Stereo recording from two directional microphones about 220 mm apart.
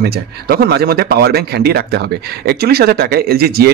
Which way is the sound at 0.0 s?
45° right (ahead or behind).